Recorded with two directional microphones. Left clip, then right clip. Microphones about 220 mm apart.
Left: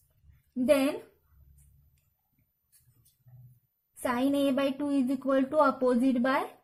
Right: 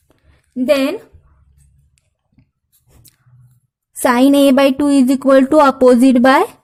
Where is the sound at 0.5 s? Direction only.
35° right (ahead or behind).